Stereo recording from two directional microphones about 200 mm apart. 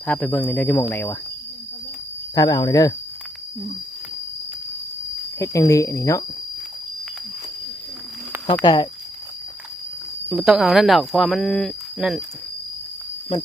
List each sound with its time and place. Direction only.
0.0 s speech: 5° left (ahead or behind)
2.3 s speech: 20° left (ahead or behind)
5.4 s speech: 15° left (ahead or behind)
8.6 s speech: 20° left (ahead or behind)
10.2 s speech: centre (ahead or behind)